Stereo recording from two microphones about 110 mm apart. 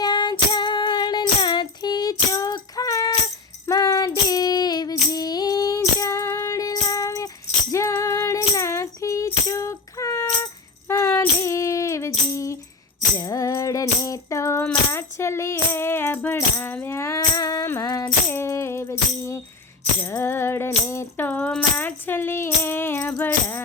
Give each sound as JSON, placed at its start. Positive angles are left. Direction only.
{"t": 0.0, "sound": "child singing", "side_deg": 45}
{"t": 3.7, "sound": "female singing", "side_deg": 35}
{"t": 7.7, "sound": "music", "side_deg": 25}
{"t": 11.3, "sound": "a sound", "side_deg": 25}
{"t": 13.1, "sound": "music", "side_deg": 30}
{"t": 17.3, "sound": "music", "side_deg": 35}